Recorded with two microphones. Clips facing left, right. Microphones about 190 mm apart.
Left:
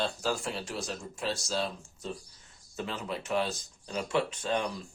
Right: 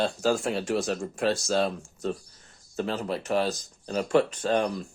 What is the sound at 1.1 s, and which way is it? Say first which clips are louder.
Speech: right 7 dB; 60° right (ahead or behind).